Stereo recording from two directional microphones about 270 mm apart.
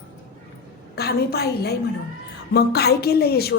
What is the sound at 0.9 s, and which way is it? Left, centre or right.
A woman's voice, left.